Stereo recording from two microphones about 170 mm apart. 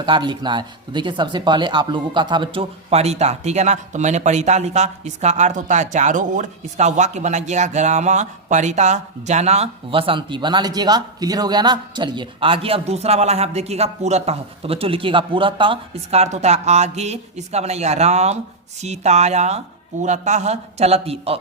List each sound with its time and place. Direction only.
0.0 s speech: 25° right (ahead or behind)